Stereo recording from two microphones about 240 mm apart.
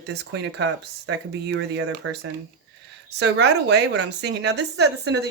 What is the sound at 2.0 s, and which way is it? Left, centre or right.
Speech, right.